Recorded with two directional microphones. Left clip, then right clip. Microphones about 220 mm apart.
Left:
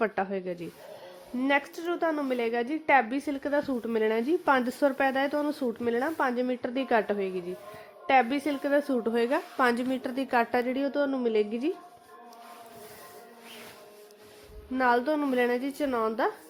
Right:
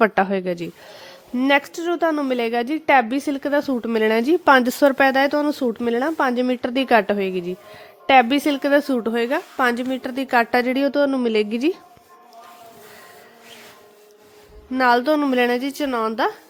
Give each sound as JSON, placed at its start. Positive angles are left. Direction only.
{"t": 0.0, "sound": "a woman's voice", "side_deg": -50}
{"t": 14.7, "sound": "a woman's voice", "side_deg": -45}